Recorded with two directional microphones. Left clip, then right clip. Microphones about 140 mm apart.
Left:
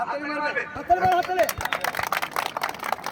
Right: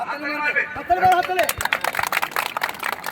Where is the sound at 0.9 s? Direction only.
65° left (ahead or behind).